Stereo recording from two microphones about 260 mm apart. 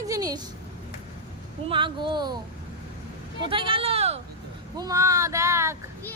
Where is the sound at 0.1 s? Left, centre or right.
Centre.